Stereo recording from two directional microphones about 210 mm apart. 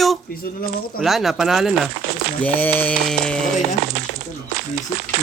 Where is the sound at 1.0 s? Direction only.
Centre (ahead or behind).